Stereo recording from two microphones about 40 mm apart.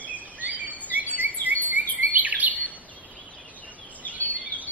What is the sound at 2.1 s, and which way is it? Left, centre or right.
Bird vocalization, right.